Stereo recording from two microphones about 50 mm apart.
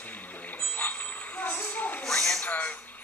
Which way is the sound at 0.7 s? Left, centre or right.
Left.